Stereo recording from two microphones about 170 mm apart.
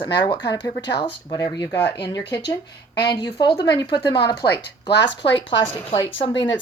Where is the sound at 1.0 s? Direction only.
25° left (ahead or behind).